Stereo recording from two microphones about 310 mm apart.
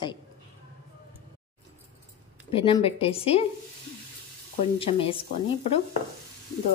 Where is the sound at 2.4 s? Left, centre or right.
Centre.